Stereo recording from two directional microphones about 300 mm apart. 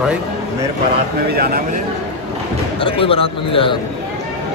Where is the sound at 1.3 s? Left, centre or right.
Right.